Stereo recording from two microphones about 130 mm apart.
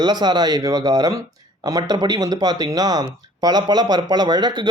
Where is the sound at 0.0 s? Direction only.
35° right (ahead or behind).